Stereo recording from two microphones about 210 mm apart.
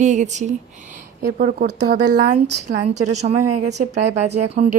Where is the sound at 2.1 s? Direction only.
35° right (ahead or behind).